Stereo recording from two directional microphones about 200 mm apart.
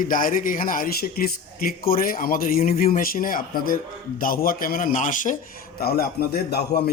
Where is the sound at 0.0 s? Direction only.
45° left (ahead or behind).